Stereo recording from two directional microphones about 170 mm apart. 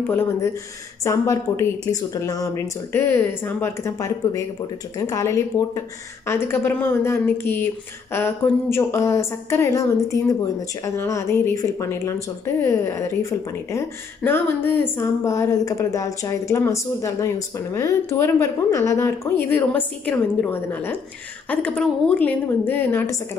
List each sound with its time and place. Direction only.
0.0 s speech: 10° left (ahead or behind)